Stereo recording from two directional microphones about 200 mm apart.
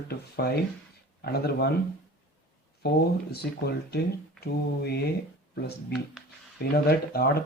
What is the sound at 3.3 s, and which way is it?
Speech, 55° left (ahead or behind).